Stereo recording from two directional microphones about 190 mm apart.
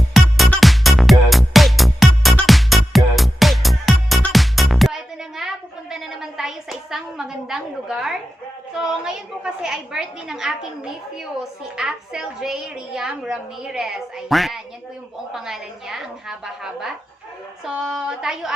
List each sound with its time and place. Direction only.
0.1 s music: centre (ahead or behind)
8.8 s a woman's voice: 5° right (ahead or behind)
17.7 s a woman's voice: 5° right (ahead or behind)